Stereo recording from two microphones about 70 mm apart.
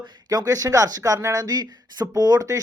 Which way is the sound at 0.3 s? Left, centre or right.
Right.